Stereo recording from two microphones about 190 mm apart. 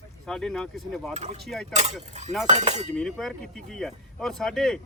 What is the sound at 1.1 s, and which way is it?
Speech, 35° right (ahead or behind).